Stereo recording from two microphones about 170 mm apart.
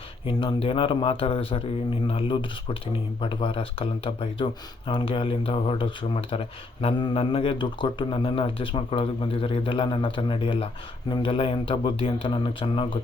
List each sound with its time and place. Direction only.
0.3 s a man's voice: 30° left (ahead or behind)